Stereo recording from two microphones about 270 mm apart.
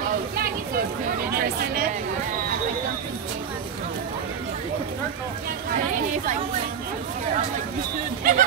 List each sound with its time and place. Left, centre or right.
1.3 s chatter: right
8.2 s speech: right